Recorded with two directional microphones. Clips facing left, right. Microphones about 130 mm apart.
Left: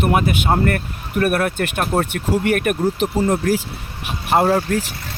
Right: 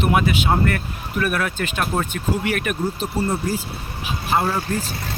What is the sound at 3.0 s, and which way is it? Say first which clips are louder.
Speech: left 5 dB; 90° left.